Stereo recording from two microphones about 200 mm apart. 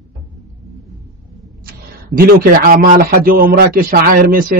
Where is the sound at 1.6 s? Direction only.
45° right (ahead or behind).